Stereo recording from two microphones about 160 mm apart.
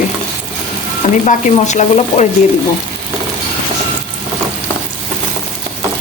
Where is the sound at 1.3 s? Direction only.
45° left (ahead or behind).